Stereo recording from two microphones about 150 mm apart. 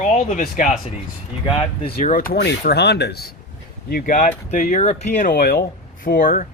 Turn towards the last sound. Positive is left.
turn(degrees=70)  # may be behind; listen again after turning